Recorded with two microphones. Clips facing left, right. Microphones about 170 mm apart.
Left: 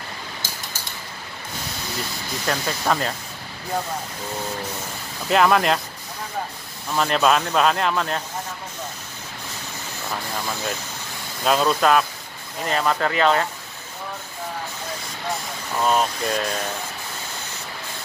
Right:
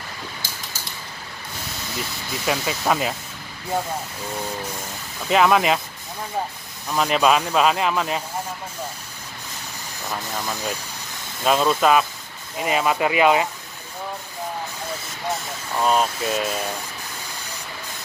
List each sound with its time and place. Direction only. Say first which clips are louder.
2.4 s speech: right 1 dB; 5° right (ahead or behind)
5.3 s speech: even; centre (ahead or behind)
7.0 s speech: right 1 dB; 5° right (ahead or behind)
11.4 s speech: right 1 dB; 5° right (ahead or behind)
15.8 s speech: right 1 dB; centre (ahead or behind)